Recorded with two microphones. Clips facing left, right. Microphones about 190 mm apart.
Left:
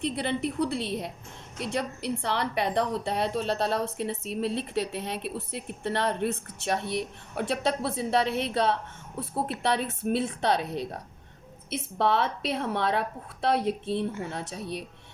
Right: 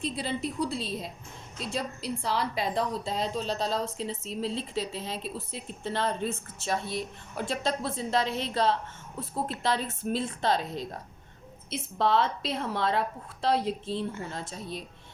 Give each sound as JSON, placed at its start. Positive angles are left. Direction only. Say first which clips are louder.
{"t": 0.0, "sound": "a woman's voice", "louder": "left 3 dB", "side_deg": 60}
{"t": 11.9, "sound": "a woman's voice", "louder": "even", "side_deg": 60}